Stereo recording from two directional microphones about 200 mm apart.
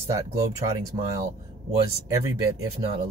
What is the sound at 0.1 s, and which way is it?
Speech, 15° right (ahead or behind).